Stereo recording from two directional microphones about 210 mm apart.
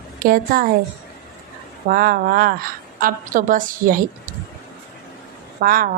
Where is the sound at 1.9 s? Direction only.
45° right (ahead or behind).